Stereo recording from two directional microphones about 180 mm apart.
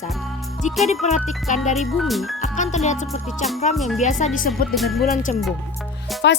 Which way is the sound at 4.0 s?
40° left (ahead or behind).